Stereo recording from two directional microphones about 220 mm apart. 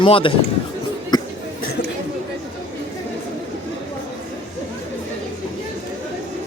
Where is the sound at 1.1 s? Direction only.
20° left (ahead or behind).